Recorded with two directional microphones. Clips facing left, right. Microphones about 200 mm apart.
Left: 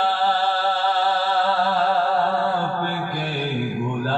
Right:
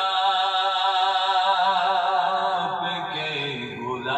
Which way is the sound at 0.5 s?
50° left (ahead or behind).